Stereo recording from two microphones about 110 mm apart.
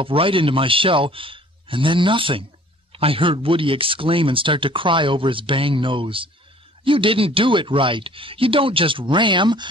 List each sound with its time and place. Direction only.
0.0 s speech: 55° right (ahead or behind)